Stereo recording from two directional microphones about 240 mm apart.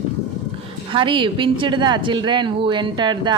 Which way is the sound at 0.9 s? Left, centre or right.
Right.